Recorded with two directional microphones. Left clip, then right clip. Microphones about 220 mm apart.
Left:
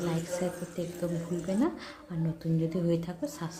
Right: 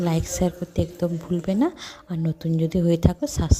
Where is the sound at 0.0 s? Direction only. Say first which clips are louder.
Right 7 dB; 45° right (ahead or behind).